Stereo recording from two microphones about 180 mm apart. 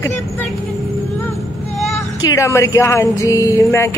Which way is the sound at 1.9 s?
15° left (ahead or behind).